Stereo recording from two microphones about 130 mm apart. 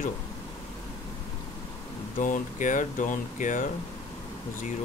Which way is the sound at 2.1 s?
85° left.